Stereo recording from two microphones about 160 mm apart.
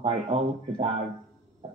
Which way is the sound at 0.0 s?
40° right (ahead or behind).